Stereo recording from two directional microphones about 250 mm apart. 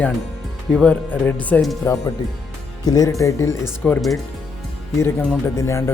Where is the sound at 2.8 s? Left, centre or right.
Centre.